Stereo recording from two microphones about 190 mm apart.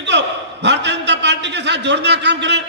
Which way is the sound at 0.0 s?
65° right (ahead or behind).